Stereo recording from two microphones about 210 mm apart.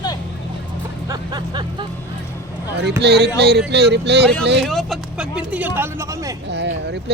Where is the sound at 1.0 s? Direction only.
20° right (ahead or behind).